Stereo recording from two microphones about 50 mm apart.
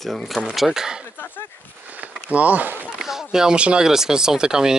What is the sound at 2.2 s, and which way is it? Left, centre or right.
Speech, right.